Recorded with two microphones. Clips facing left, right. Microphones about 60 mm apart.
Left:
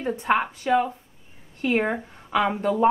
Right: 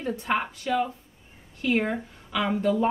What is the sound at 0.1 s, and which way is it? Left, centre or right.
A woman's voice, left.